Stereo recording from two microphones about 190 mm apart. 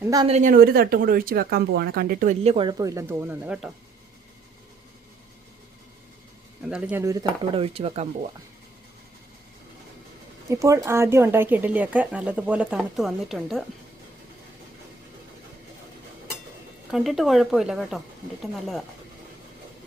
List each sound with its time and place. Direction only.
0.0 s speech: 20° right (ahead or behind)
0.3 s speech: 35° right (ahead or behind)
0.5 s speech: 50° right (ahead or behind); by 3.7 s 5° right (ahead or behind)
6.6 s speech: 5° right (ahead or behind)
7.0 s speech: 15° right (ahead or behind)
7.5 s speech: 30° right (ahead or behind)
10.5 s speech: 15° right (ahead or behind); by 13.7 s centre (ahead or behind)
16.9 s speech: centre (ahead or behind)